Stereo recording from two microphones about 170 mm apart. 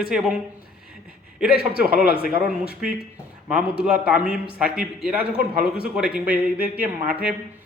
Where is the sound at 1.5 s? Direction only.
65° left (ahead or behind).